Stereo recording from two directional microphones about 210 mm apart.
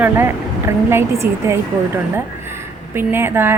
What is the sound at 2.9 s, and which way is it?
Speech, 10° right (ahead or behind).